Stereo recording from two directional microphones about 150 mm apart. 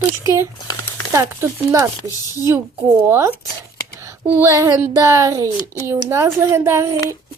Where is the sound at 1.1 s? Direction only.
20° right (ahead or behind).